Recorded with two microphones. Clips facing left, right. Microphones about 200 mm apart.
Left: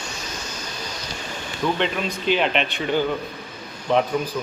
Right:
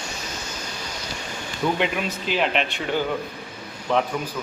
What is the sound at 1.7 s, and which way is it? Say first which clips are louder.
Speech: even; 5° right (ahead or behind).